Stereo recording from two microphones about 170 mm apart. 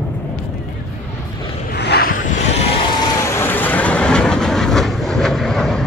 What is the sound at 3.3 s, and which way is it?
Train, 10° left (ahead or behind).